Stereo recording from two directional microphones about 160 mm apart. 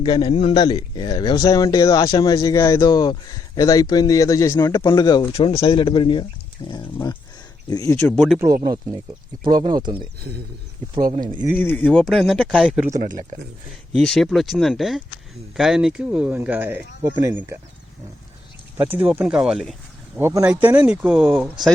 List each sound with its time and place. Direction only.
0.0 s speech: 30° left (ahead or behind)
8.1 s speech: centre (ahead or behind)
8.6 s speech: 25° right (ahead or behind)
9.4 s speech: 55° right (ahead or behind)
9.7 s speech: 30° right (ahead or behind)
11.6 s speech: 10° left (ahead or behind); by 17.6 s 20° right (ahead or behind)
18.8 s speech: 10° right (ahead or behind)
20.1 s speech: 15° right (ahead or behind)